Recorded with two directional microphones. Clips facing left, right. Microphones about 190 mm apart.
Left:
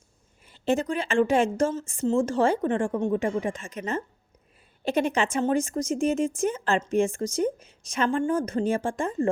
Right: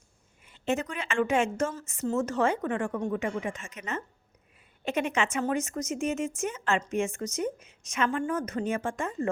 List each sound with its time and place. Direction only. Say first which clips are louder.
0.4 s speech: left 5 dB; 35° left (ahead or behind)